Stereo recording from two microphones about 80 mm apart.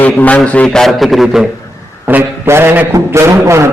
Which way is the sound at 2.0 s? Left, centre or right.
Right.